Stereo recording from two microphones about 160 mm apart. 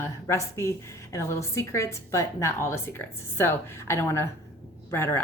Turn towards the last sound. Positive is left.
turn(degrees=15)  # may be behind; listen again after turning